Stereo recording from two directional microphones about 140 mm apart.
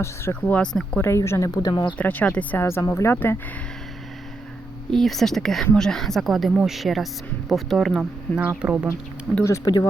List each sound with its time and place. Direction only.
0.0 s speech: 15° left (ahead or behind); by 2.0 s 30° left (ahead or behind)
2.0 s speech: 10° left (ahead or behind)
4.9 s speech: centre (ahead or behind)
8.4 s speech: 10° right (ahead or behind)
9.3 s speech: 20° left (ahead or behind)